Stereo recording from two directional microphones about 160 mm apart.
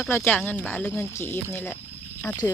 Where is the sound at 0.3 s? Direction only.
10° left (ahead or behind).